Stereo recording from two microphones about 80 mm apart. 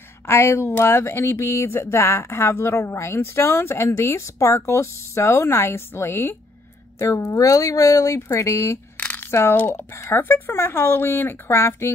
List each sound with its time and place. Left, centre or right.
0.3 s speech: left
9.0 s a sound: left
9.3 s speech: left